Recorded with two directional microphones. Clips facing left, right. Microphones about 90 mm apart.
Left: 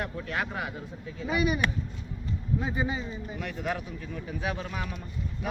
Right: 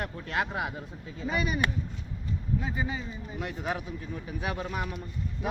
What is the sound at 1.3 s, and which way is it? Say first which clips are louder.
A man's voice: left 2 dB; 10° left (ahead or behind).